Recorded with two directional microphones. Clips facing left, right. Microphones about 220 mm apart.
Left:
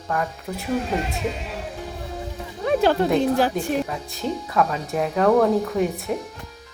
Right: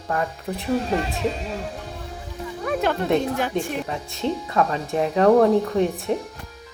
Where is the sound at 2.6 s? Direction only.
30° left (ahead or behind).